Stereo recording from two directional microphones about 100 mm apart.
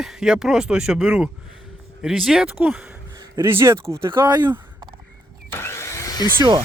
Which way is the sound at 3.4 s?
25° right (ahead or behind).